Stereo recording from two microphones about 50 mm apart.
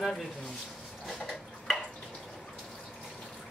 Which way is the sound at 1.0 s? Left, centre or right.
Centre.